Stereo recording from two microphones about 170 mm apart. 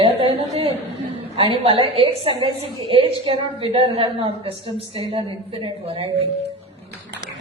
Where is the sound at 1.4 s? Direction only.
30° right (ahead or behind).